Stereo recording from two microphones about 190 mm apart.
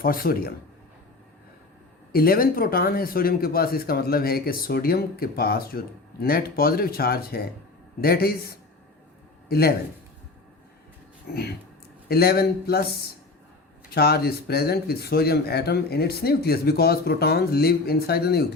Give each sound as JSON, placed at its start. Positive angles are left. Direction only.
{"t": 0.0, "sound": "speech", "side_deg": 50}
{"t": 2.1, "sound": "speech", "side_deg": 50}
{"t": 11.3, "sound": "speech", "side_deg": 55}